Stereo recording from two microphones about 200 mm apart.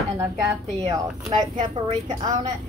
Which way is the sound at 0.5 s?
15° right (ahead or behind).